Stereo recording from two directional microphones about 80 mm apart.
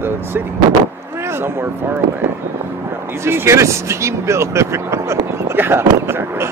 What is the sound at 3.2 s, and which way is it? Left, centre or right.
Speech, right.